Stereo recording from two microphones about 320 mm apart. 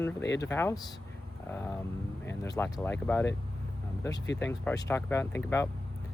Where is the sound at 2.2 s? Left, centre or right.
Centre.